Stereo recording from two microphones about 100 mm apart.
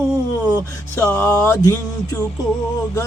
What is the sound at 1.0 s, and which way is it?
Music, 20° left (ahead or behind).